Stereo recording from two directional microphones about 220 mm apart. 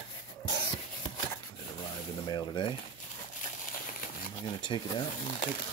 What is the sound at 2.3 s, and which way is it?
Speech, 20° left (ahead or behind).